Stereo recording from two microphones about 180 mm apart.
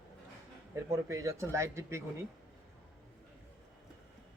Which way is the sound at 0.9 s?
15° right (ahead or behind).